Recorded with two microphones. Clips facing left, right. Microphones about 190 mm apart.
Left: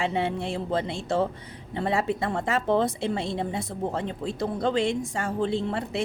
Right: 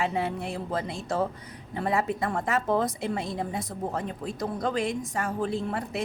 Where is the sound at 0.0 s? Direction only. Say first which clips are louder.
Left 2 dB; 25° left (ahead or behind).